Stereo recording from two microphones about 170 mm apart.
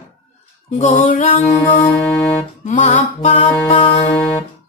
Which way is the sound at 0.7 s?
45° left (ahead or behind).